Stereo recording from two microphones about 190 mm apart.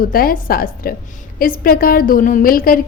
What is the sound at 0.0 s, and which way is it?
A woman's voice, 50° left (ahead or behind).